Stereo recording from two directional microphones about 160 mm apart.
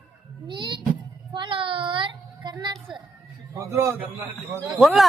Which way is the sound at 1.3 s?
30° right (ahead or behind).